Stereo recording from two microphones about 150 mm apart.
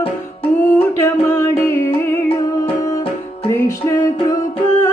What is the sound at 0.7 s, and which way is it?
Music, 15° left (ahead or behind).